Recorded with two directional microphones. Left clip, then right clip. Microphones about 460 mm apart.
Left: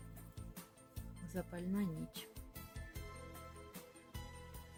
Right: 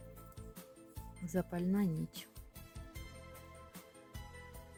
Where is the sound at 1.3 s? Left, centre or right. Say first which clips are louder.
Right 6 dB; centre.